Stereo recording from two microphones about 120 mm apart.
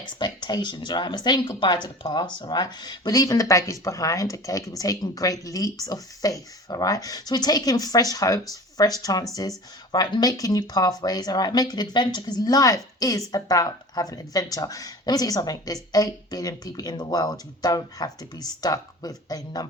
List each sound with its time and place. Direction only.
0.0 s speech: 40° left (ahead or behind)